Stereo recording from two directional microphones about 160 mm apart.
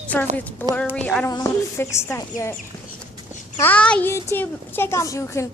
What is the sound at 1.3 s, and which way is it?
A woman's voice, 20° left (ahead or behind).